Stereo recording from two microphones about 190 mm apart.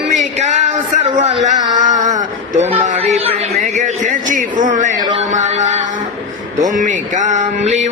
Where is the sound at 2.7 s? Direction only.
35° right (ahead or behind).